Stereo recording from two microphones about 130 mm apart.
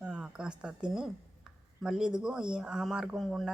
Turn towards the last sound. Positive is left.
turn(degrees=0)  # may be behind; listen again after turning